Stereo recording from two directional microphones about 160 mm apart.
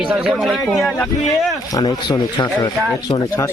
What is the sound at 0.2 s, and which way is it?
A man's voice, 5° right (ahead or behind).